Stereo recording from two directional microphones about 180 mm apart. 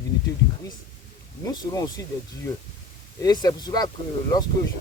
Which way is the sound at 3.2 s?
20° left (ahead or behind).